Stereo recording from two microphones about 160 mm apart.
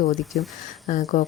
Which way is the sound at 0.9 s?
45° left (ahead or behind).